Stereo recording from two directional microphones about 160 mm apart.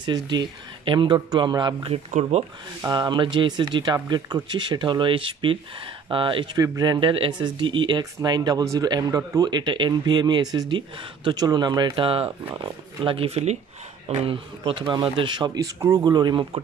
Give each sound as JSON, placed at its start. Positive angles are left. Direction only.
{"t": 0.0, "sound": "speech", "side_deg": -25}
{"t": 2.8, "sound": "speech", "side_deg": -25}